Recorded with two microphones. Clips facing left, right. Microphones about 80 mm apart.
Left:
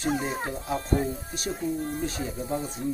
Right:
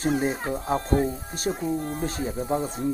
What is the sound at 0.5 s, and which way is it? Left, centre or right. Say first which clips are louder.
Speech: right 3 dB; right.